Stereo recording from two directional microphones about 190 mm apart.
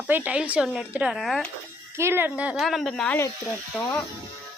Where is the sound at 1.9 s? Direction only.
15° right (ahead or behind); by 3.3 s 10° left (ahead or behind).